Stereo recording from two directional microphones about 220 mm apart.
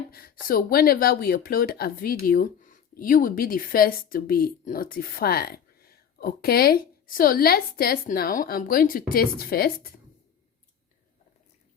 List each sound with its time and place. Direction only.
0.1 s speech: 45° left (ahead or behind)